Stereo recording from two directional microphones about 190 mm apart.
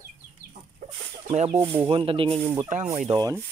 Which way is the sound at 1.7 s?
25° right (ahead or behind).